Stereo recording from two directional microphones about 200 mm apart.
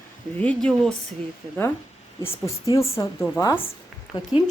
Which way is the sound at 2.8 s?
30° left (ahead or behind).